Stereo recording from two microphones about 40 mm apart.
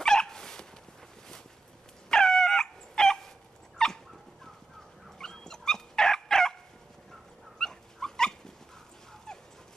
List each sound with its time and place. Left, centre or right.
0.0 s dog: centre
2.0 s dog: centre
5.2 s dog: centre
7.5 s dog: centre